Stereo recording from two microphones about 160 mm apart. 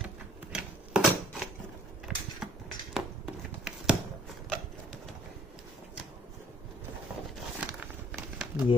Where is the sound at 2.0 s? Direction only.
Centre (ahead or behind).